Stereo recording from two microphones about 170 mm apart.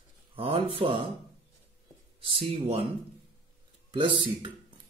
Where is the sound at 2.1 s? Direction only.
30° right (ahead or behind).